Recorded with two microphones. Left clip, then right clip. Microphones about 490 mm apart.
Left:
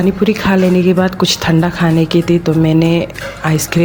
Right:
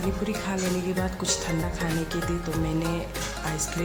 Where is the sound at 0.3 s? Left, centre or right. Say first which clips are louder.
Left 16 dB; right.